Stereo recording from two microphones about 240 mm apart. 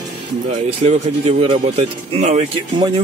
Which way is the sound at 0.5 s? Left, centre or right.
Right.